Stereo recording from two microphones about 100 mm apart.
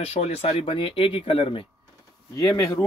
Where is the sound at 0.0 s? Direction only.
90° left; by 1.7 s 65° left (ahead or behind).